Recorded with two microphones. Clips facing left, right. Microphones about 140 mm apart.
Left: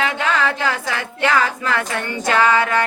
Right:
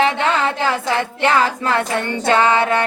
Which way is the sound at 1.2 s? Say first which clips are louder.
Right 1 dB; 30° right (ahead or behind).